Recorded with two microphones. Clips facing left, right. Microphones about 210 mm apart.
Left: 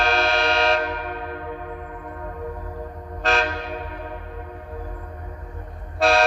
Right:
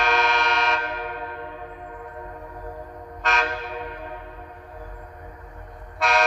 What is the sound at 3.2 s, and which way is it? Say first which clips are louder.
Train: left 4 dB; 30° left (ahead or behind).